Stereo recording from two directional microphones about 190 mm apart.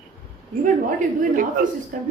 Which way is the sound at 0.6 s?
45° right (ahead or behind).